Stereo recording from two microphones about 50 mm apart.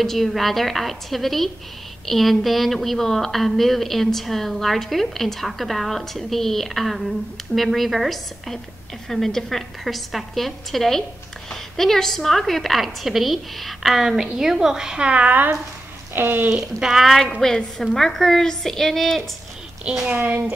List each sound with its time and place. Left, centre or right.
0.0 s a woman's voice: centre; by 15.3 s right
16.2 s speech: right
16.4 s a woman's voice: centre
17.4 s a woman's voice: centre
20.2 s speech: right